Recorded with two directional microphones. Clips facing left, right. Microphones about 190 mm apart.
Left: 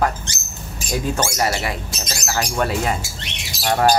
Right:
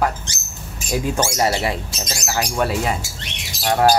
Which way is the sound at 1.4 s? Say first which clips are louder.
Right 4 dB; 25° right (ahead or behind).